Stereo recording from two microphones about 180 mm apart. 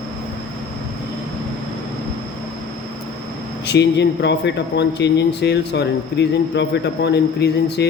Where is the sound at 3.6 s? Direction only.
70° left (ahead or behind).